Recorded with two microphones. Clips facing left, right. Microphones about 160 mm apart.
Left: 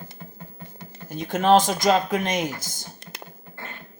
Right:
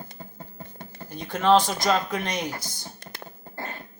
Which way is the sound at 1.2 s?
45° left (ahead or behind).